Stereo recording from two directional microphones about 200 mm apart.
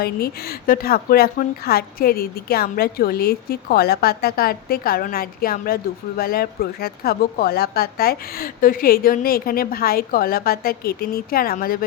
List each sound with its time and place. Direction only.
0.0 s speech: 50° left (ahead or behind)